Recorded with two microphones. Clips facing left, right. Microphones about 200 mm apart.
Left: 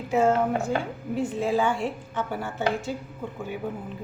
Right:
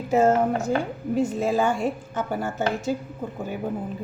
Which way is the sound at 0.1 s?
40° right (ahead or behind).